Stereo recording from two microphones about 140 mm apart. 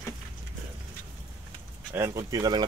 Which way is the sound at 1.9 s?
20° right (ahead or behind).